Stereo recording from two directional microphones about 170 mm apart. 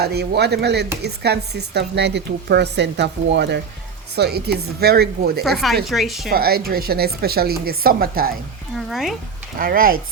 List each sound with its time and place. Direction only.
0.0 s speech: 70° right (ahead or behind); by 3.6 s 90° right
4.1 s speech: 70° right (ahead or behind)
5.4 s speech: centre (ahead or behind)
6.3 s speech: 65° right (ahead or behind)
8.7 s speech: centre (ahead or behind)
9.6 s speech: 55° right (ahead or behind)